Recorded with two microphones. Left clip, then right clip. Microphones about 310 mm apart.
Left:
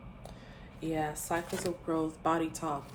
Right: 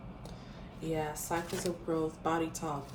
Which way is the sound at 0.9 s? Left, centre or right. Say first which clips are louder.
Left 1 dB; left.